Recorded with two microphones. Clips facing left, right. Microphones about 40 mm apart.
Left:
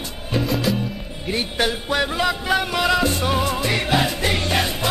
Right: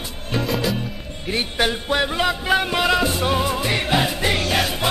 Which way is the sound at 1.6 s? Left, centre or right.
Centre.